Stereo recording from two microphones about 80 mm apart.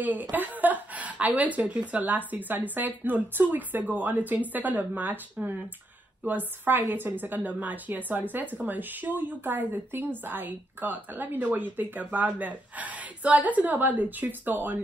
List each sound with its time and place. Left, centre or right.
0.0 s a woman's voice: right